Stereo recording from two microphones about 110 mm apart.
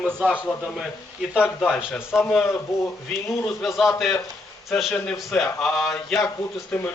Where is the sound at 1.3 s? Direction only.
5° right (ahead or behind).